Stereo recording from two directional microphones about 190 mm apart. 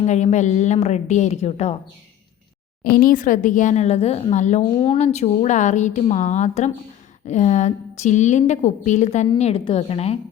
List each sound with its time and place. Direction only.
0.0 s a woman's voice: 35° left (ahead or behind)
2.9 s a woman's voice: 45° left (ahead or behind); by 10.2 s 30° left (ahead or behind)